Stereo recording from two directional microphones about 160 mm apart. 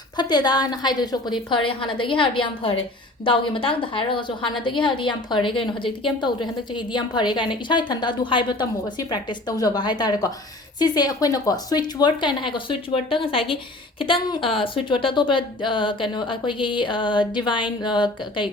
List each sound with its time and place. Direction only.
0.2 s a woman's voice: 25° left (ahead or behind)